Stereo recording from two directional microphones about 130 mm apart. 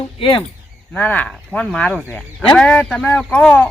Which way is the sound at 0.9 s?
15° left (ahead or behind).